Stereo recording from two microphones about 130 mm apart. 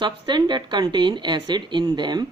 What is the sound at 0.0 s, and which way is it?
Speech, 35° right (ahead or behind).